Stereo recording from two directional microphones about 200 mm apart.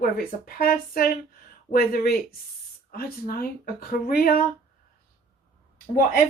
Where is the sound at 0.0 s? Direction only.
45° left (ahead or behind).